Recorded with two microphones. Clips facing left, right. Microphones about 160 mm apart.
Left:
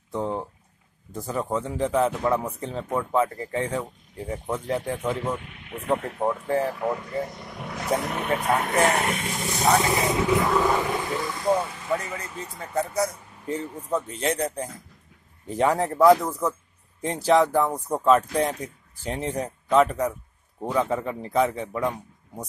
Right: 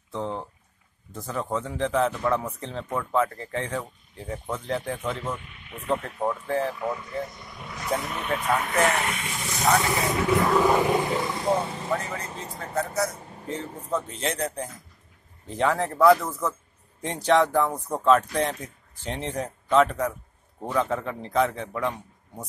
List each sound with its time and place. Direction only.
0.1 s a sound: 10° left (ahead or behind)
1.1 s speech: 10° left (ahead or behind)
5.4 s vehicle: 65° left (ahead or behind)
6.2 s speech: 10° left (ahead or behind)
6.7 s speech: 55° left (ahead or behind)
8.5 s speech: 45° left (ahead or behind)
9.8 s speech: 20° left (ahead or behind)
10.4 s speech: 10° right (ahead or behind)
11.7 s speech: 30° right (ahead or behind)
14.2 s speech: 5° left (ahead or behind)